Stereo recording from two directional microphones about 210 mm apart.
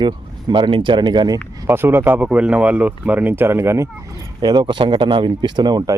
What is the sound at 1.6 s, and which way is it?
Speech, 10° right (ahead or behind).